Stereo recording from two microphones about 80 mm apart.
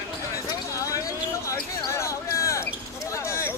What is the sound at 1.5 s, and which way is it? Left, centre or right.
Basketball bounce, left.